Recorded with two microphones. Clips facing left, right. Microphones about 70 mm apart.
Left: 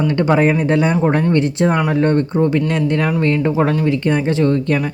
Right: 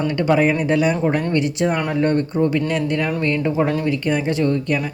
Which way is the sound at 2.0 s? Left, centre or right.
Left.